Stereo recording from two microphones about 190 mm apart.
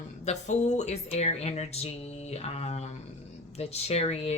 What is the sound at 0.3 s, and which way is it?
A woman's voice, 35° left (ahead or behind).